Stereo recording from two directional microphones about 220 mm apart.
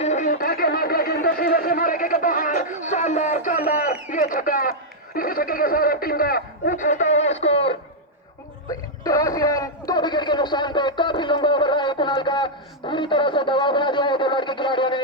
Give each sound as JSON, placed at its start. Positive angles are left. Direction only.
{"t": 0.0, "sound": "a sound", "side_deg": 35}
{"t": 5.1, "sound": "speech", "side_deg": 40}
{"t": 9.0, "sound": "a man's voice", "side_deg": 15}